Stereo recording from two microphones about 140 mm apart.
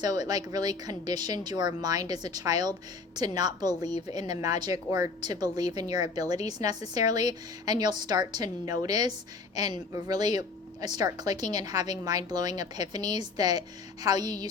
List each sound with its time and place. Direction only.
0.0 s speech: 30° right (ahead or behind)